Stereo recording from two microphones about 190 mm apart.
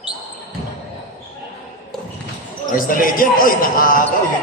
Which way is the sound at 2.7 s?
45° left (ahead or behind).